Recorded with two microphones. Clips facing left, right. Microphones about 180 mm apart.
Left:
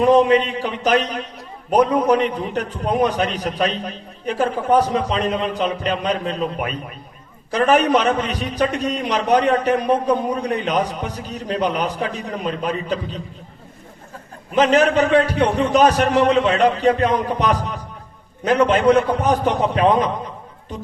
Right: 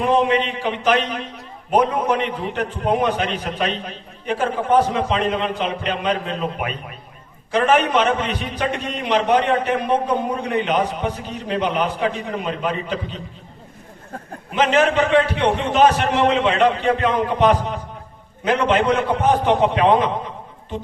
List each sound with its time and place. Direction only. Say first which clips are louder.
0.0 s a man's voice: left 4 dB; 40° left (ahead or behind)
14.5 s a man's voice: left 2 dB; 40° left (ahead or behind)